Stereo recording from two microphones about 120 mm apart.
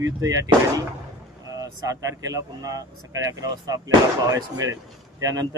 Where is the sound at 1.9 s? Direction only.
30° right (ahead or behind).